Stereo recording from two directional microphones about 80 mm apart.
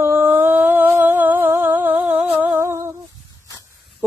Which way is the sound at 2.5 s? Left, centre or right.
Right.